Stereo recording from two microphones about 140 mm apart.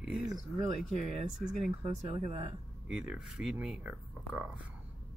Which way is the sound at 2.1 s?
50° right (ahead or behind).